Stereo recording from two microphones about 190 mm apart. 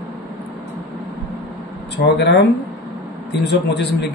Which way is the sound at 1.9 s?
65° left (ahead or behind).